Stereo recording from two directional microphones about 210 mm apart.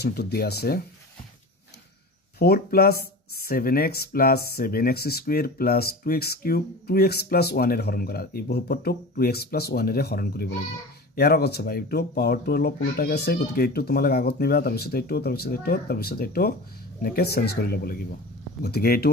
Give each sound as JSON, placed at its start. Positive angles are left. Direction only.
{"t": 0.0, "sound": "speech", "side_deg": 50}
{"t": 2.3, "sound": "speech", "side_deg": 45}